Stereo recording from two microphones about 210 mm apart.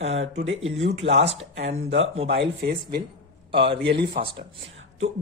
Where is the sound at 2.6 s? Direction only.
45° right (ahead or behind).